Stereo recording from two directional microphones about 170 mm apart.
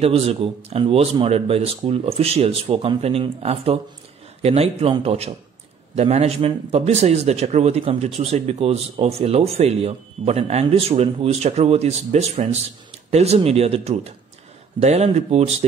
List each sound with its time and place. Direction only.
0.0 s speech: 35° right (ahead or behind)